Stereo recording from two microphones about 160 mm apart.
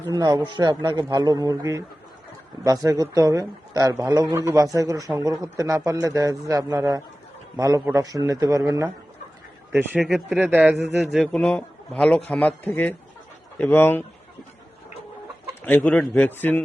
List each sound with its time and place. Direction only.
0.1 s speech: 25° right (ahead or behind)
10.0 s a man's voice: centre (ahead or behind)
15.6 s a man's voice: 10° left (ahead or behind)